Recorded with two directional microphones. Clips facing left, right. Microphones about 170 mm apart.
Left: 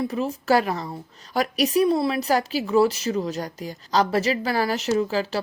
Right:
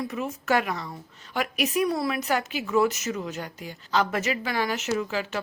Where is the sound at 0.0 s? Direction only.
30° left (ahead or behind).